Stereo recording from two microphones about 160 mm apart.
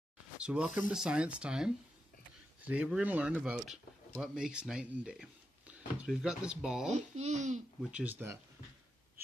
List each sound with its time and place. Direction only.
0.4 s speech: 5° right (ahead or behind)
7.0 s speech: 45° right (ahead or behind)
7.9 s speech: 10° right (ahead or behind)